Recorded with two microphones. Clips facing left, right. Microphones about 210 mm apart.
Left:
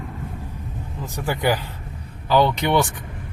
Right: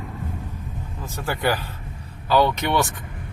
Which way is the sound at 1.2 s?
15° left (ahead or behind).